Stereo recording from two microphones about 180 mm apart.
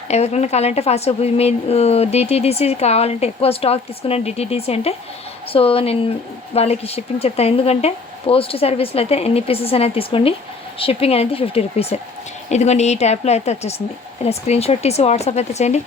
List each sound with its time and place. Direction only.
0.1 s a woman's voice: 35° left (ahead or behind)